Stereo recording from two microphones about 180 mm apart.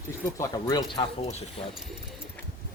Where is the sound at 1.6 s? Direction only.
30° left (ahead or behind).